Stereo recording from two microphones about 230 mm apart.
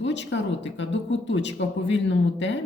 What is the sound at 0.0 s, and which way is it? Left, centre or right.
Speech, left.